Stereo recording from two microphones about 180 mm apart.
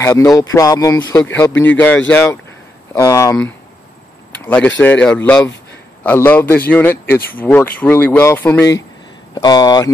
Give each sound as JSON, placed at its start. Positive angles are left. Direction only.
{"t": 0.0, "sound": "speech", "side_deg": 15}
{"t": 4.5, "sound": "speech", "side_deg": 5}